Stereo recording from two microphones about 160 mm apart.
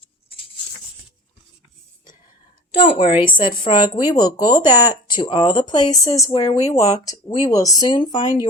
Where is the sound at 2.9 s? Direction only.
35° left (ahead or behind).